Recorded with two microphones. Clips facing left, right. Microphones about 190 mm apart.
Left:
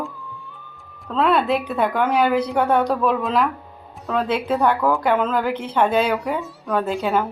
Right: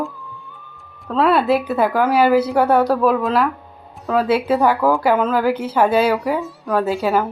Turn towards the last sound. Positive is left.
turn(degrees=0)  # may be behind; listen again after turning